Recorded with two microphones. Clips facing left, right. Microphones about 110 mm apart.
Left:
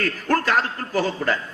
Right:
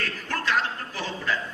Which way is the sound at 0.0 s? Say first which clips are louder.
Left 8 dB; 50° left (ahead or behind).